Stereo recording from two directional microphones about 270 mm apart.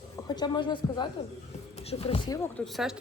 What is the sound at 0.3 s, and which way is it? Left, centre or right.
Speech, centre.